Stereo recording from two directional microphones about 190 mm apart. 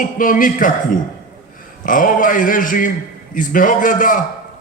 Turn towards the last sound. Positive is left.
turn(degrees=45)  # may be behind; listen again after turning